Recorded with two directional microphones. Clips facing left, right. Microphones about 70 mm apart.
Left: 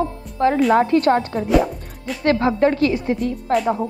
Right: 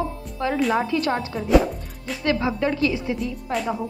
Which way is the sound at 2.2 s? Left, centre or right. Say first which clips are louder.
Left 6 dB; left.